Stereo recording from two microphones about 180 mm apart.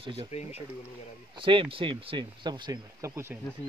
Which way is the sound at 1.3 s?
30° right (ahead or behind).